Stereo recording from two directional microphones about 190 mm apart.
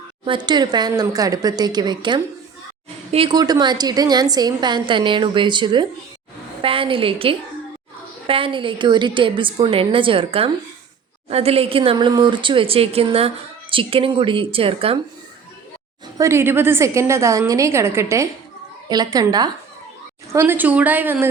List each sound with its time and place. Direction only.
0.3 s speech: 25° right (ahead or behind)
16.1 s a woman's voice: 15° right (ahead or behind)